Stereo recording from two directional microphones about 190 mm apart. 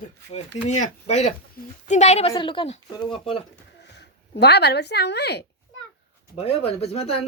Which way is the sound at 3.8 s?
60° left (ahead or behind).